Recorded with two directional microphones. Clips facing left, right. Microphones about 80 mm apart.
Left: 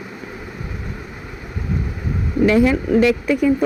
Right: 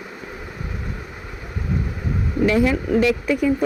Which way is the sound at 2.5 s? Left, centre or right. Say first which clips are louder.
Left 3 dB; left.